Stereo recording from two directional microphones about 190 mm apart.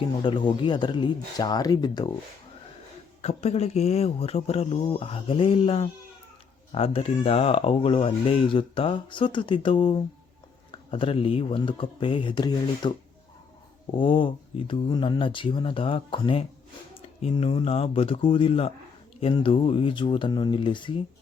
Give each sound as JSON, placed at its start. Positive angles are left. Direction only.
{"t": 0.0, "sound": "speech", "side_deg": 25}
{"t": 3.2, "sound": "speech", "side_deg": 35}
{"t": 14.0, "sound": "speech", "side_deg": 25}